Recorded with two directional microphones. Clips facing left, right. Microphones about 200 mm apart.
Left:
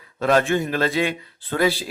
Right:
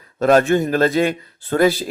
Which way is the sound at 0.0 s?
45° right (ahead or behind).